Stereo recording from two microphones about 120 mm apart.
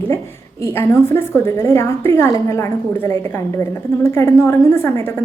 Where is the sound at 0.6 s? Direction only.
20° left (ahead or behind).